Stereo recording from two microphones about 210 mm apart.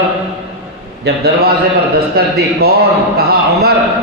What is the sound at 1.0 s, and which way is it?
A man's voice, 50° right (ahead or behind).